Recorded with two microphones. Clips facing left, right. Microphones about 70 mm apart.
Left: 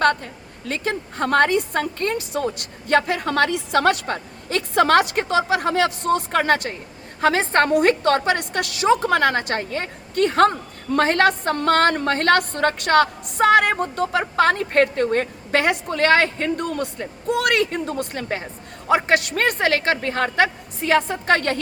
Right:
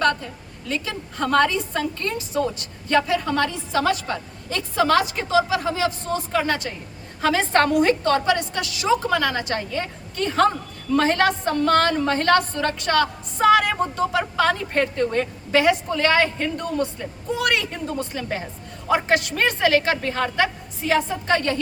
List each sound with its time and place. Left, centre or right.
0.0 s a sound: left
0.7 s a woman's voice: left
7.8 s a woman's voice: left
18.9 s a woman's voice: left